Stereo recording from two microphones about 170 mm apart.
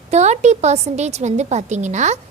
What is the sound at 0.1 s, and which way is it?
A woman's voice, 40° right (ahead or behind).